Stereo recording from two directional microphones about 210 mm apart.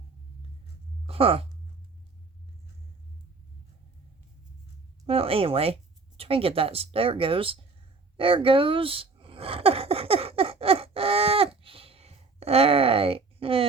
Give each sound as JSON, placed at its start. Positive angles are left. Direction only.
{"t": 1.0, "sound": "speech", "side_deg": -25}
{"t": 5.0, "sound": "speech", "side_deg": -25}
{"t": 8.1, "sound": "a sound", "side_deg": -25}